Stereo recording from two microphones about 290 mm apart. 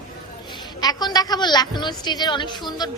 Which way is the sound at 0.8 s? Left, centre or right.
Centre.